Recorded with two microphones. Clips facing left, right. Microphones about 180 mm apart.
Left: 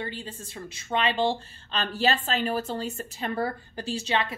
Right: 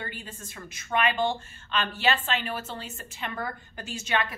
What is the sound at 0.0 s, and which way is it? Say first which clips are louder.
A woman's voice: left 4 dB; 30° left (ahead or behind).